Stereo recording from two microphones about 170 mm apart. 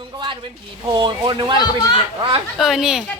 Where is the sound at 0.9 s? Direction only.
30° right (ahead or behind).